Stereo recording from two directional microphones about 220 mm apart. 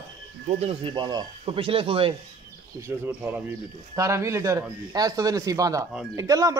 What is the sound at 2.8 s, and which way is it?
A man's voice, 10° right (ahead or behind).